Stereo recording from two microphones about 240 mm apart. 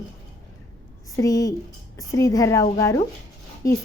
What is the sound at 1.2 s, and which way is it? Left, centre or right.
A woman's voice, centre.